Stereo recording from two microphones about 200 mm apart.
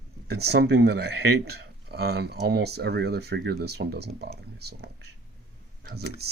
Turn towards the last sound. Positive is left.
turn(degrees=-55)  # may be behind; listen again after turning